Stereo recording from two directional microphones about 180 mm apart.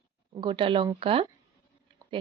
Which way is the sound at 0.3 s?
25° right (ahead or behind).